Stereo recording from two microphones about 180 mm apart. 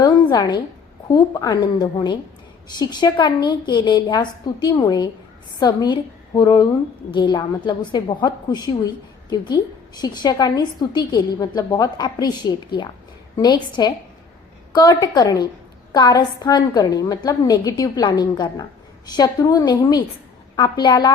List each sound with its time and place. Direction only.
0.0 s a woman's voice: 25° left (ahead or behind)